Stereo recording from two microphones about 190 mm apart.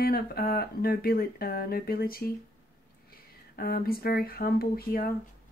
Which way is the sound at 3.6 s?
50° left (ahead or behind).